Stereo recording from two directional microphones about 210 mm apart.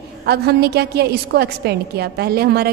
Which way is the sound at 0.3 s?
50° right (ahead or behind).